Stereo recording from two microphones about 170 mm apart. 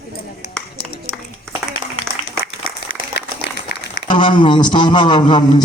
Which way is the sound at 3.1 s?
90° left.